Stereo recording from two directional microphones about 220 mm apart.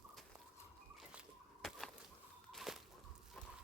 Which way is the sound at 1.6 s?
Centre (ahead or behind).